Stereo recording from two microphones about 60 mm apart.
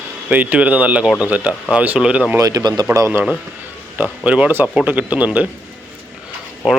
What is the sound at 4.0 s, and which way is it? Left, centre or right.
Speech, right.